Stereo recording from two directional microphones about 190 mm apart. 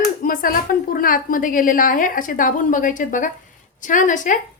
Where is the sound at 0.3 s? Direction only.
50° left (ahead or behind).